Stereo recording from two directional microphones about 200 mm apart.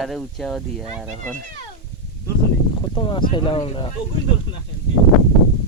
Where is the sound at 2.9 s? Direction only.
25° left (ahead or behind).